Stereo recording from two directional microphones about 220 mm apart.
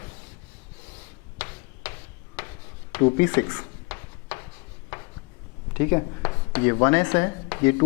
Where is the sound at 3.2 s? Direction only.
15° left (ahead or behind).